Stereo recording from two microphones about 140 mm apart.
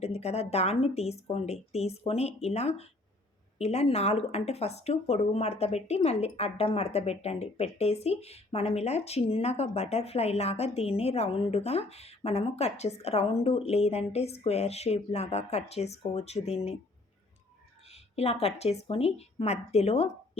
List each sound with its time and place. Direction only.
0.0 s speech: 50° left (ahead or behind)
17.8 s a woman's voice: 50° left (ahead or behind)